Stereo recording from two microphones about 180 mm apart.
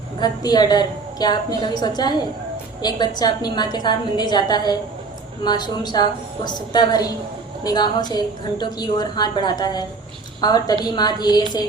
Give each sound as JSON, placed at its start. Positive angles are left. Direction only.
{"t": 0.2, "sound": "a woman's voice", "side_deg": 20}